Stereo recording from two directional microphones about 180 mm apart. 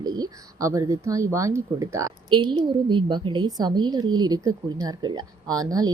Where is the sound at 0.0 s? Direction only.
20° right (ahead or behind).